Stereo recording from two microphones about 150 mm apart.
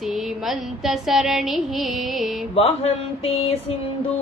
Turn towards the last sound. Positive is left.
turn(degrees=40)  # may be behind; listen again after turning